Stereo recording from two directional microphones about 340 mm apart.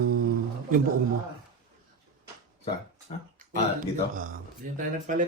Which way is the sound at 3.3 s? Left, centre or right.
Right.